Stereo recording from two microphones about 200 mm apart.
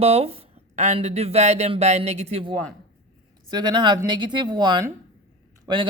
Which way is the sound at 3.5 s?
20° right (ahead or behind).